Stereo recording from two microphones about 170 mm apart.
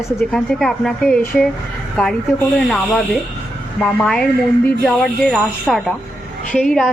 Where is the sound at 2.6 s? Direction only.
Centre (ahead or behind).